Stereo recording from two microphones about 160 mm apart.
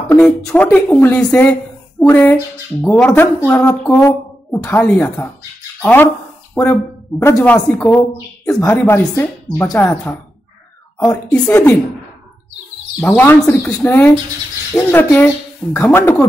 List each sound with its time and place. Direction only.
0.2 s speech: 5° left (ahead or behind)
13.0 s speech: 10° left (ahead or behind)